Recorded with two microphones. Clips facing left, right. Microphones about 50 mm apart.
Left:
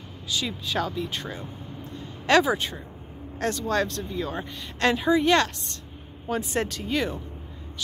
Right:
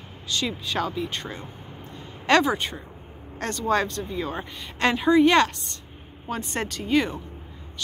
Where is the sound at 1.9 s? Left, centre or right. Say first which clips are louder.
Even; centre.